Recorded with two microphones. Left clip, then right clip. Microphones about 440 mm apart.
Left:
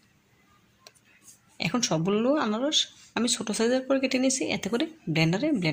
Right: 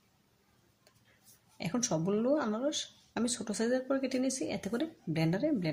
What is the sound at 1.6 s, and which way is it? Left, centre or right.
Speech, left.